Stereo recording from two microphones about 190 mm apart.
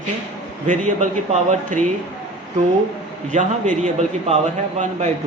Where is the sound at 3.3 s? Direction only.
40° right (ahead or behind).